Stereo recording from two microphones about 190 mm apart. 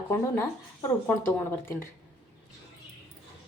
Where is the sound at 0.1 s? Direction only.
15° left (ahead or behind).